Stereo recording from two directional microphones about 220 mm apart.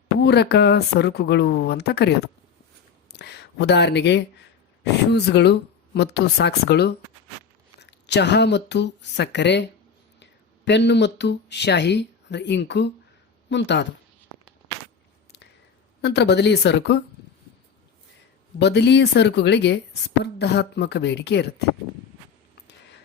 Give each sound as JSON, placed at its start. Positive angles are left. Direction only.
{"t": 0.2, "sound": "speech", "side_deg": 50}
{"t": 3.1, "sound": "a sound", "side_deg": 50}
{"t": 4.8, "sound": "speech", "side_deg": 50}
{"t": 10.7, "sound": "speech", "side_deg": 50}
{"t": 16.0, "sound": "speech", "side_deg": 50}
{"t": 18.6, "sound": "speech", "side_deg": 50}